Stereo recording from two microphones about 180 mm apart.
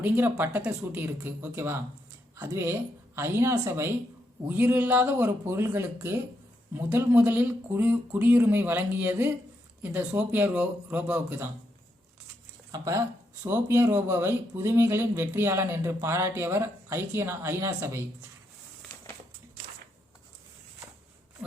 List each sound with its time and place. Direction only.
0.0 s speech: 10° right (ahead or behind)
12.7 s speech: 20° right (ahead or behind)